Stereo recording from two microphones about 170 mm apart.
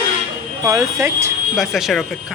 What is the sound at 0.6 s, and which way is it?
Speech, 20° right (ahead or behind).